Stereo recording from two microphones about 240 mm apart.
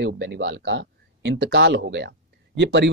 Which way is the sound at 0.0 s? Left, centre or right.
Right.